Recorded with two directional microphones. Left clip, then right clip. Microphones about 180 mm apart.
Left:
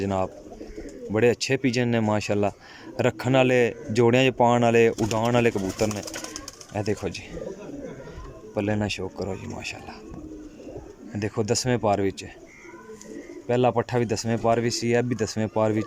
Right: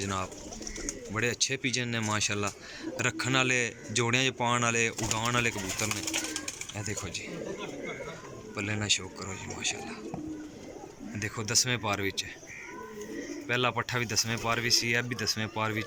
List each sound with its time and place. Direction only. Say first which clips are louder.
0.0 s speech: left 7 dB; 50° left (ahead or behind)
8.5 s speech: left 4 dB; 50° left (ahead or behind)
11.2 s speech: left 4 dB; 45° left (ahead or behind)
13.5 s speech: left 7 dB; 40° left (ahead or behind)